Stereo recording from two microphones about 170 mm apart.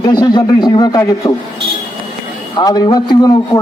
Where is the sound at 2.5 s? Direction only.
25° left (ahead or behind).